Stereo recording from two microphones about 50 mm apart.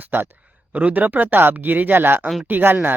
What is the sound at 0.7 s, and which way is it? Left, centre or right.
Speech, right.